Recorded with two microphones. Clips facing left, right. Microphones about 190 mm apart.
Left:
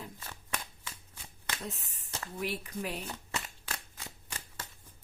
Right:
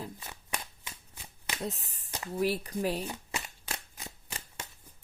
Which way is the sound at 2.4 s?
35° right (ahead or behind).